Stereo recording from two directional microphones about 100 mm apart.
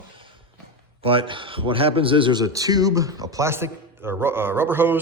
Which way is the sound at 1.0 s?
60° right (ahead or behind).